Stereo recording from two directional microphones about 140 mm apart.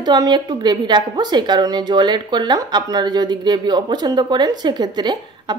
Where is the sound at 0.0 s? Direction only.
30° right (ahead or behind).